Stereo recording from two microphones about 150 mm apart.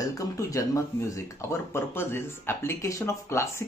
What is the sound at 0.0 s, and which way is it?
Speech, 20° left (ahead or behind).